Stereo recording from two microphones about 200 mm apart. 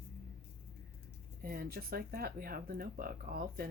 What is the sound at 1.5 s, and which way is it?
Speech, 50° right (ahead or behind).